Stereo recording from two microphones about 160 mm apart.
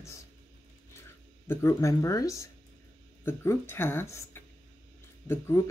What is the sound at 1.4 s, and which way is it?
Speech, 20° left (ahead or behind).